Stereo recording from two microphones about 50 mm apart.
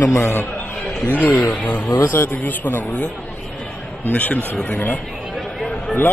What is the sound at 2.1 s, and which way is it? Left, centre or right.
Speech, left.